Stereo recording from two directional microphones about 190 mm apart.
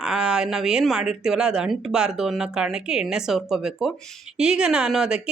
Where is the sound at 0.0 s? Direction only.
5° right (ahead or behind).